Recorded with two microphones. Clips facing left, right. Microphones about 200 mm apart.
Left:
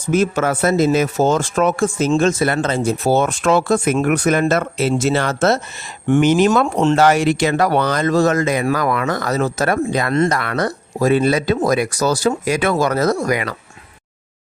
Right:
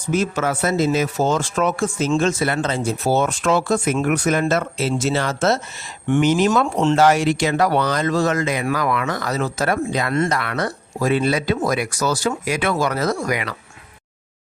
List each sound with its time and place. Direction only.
0.1 s speech: 50° left (ahead or behind)